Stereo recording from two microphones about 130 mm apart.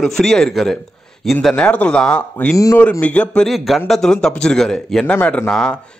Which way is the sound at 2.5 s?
25° left (ahead or behind).